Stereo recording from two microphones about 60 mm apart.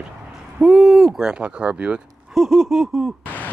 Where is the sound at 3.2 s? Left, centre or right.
Left.